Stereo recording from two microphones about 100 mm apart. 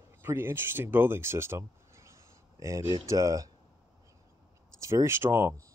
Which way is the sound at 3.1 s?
35° right (ahead or behind).